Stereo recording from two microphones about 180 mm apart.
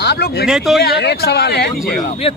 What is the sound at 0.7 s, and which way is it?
Speech, 65° left (ahead or behind).